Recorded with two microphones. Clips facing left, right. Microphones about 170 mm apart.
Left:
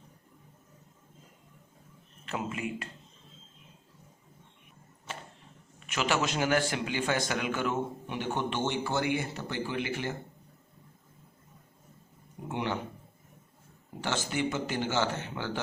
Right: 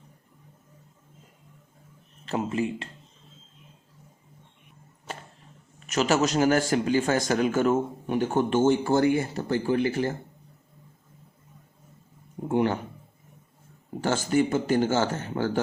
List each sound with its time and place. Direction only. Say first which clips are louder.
2.2 s speech: right 7 dB; 35° right (ahead or behind)
5.8 s speech: right 6 dB; 40° right (ahead or behind)
12.5 s speech: right 9 dB; 45° right (ahead or behind)
14.0 s speech: right 8 dB; 45° right (ahead or behind)